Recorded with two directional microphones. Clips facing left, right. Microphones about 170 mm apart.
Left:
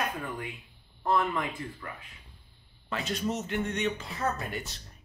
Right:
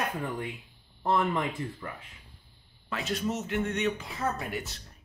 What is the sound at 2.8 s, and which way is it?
Speech, centre (ahead or behind).